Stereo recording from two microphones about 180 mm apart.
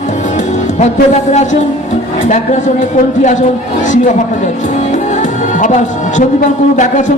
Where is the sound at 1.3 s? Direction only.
40° left (ahead or behind).